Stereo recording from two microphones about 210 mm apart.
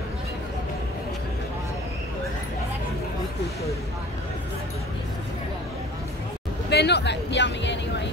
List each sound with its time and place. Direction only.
6.7 s speech: 50° left (ahead or behind)